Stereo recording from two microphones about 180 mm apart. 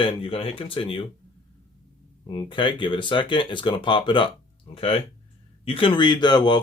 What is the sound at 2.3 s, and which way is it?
Speech, 25° left (ahead or behind).